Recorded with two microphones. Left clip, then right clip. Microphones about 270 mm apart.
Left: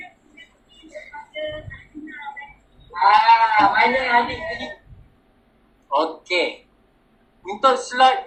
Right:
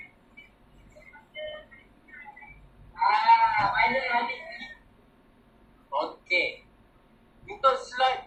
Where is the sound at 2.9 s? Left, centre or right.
Left.